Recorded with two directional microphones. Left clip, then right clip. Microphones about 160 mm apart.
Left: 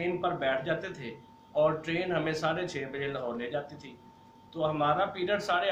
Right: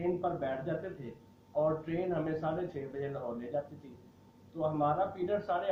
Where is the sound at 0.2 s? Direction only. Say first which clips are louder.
Left 5 dB; 15° left (ahead or behind).